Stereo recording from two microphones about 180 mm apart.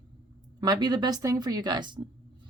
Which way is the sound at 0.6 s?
25° right (ahead or behind).